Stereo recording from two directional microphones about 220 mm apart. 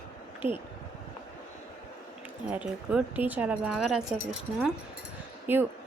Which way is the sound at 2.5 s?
5° right (ahead or behind).